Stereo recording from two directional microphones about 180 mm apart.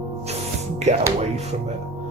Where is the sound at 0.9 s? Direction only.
40° right (ahead or behind).